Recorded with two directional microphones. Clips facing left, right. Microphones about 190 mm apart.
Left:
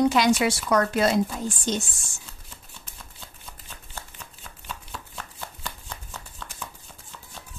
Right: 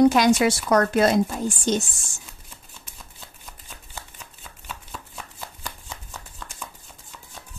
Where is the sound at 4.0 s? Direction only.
10° right (ahead or behind).